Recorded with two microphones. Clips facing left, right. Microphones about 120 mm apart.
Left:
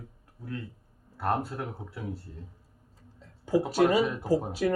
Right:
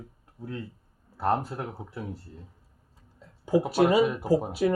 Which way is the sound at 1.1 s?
20° right (ahead or behind).